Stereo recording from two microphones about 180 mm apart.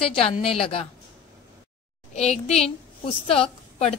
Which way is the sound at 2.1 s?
40° left (ahead or behind).